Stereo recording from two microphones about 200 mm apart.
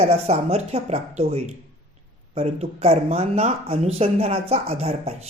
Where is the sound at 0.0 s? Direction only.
30° right (ahead or behind).